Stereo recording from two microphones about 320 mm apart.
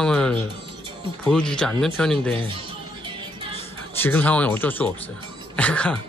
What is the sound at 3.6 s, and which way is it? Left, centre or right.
Speech, centre.